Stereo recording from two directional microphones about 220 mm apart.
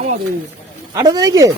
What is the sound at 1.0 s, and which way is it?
Speech, 15° right (ahead or behind).